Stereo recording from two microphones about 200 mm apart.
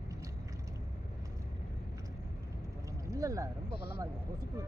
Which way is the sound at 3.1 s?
15° right (ahead or behind).